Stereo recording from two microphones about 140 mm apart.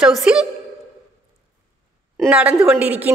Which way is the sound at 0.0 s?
Centre (ahead or behind).